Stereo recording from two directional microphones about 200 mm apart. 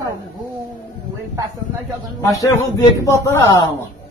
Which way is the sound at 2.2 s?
15° left (ahead or behind).